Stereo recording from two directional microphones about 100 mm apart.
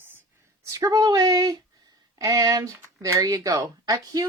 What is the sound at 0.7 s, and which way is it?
Speech, 35° right (ahead or behind).